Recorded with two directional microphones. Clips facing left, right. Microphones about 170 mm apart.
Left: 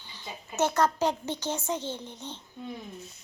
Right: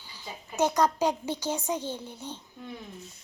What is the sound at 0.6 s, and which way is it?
A child's voice, 15° right (ahead or behind).